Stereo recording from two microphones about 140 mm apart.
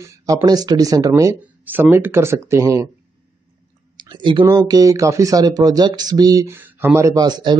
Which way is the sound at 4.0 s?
35° right (ahead or behind).